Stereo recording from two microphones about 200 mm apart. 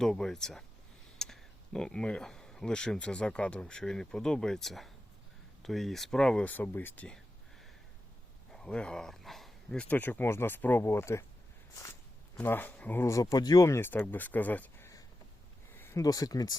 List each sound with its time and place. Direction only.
0.0 s speech: 5° left (ahead or behind)
8.5 s speech: 5° left (ahead or behind)
12.4 s speech: 10° left (ahead or behind)